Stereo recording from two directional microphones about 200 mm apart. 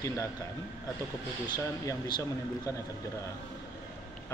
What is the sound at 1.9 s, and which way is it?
Speech, 20° left (ahead or behind).